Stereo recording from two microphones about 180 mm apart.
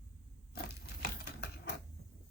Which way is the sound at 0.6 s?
65° left (ahead or behind).